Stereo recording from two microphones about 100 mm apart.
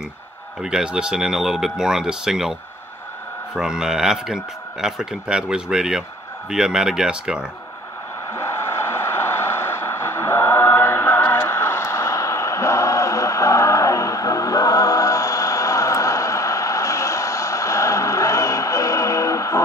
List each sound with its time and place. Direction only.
0.6 s speech: 5° right (ahead or behind)
3.5 s a man's voice: 5° right (ahead or behind)
8.4 s a sound: 25° left (ahead or behind)